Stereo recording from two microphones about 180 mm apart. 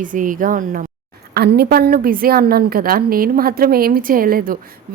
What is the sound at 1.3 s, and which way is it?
A woman's voice, 65° right (ahead or behind).